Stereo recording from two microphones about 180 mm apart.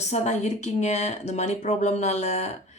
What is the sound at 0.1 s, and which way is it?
Speech, 40° left (ahead or behind).